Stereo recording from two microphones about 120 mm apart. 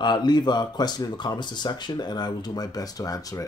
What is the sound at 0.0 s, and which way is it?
Speech, 40° left (ahead or behind).